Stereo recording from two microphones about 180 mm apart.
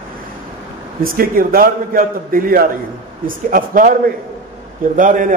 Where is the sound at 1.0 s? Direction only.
55° right (ahead or behind).